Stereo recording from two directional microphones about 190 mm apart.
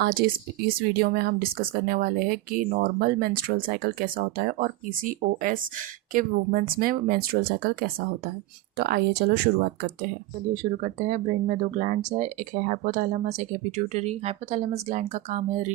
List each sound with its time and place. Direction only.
0.0 s speech: 50° right (ahead or behind)
10.5 s speech: 40° right (ahead or behind)